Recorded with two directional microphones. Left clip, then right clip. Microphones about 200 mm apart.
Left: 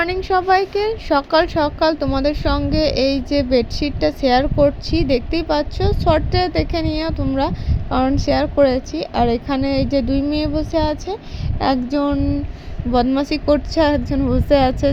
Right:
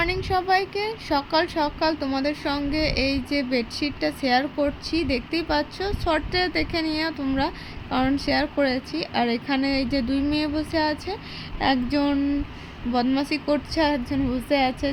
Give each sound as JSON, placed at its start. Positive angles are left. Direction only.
{"t": 0.0, "sound": "speech", "side_deg": 20}
{"t": 12.9, "sound": "speech", "side_deg": 20}